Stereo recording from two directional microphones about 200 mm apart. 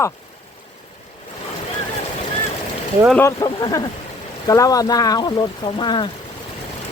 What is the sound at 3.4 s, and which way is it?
Speech, 20° left (ahead or behind).